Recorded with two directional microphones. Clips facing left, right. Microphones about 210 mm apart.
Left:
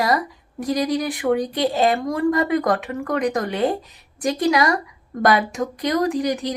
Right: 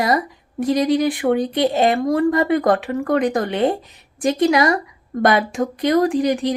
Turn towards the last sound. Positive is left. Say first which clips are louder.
# right 4 dB
turn(degrees=-30)  # may be behind; listen again after turning